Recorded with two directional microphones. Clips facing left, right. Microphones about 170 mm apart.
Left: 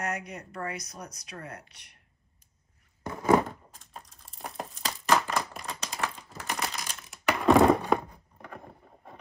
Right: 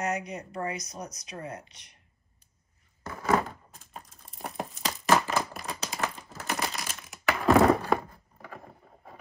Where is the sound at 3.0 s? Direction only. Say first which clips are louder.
Left 3 dB; 15° left (ahead or behind).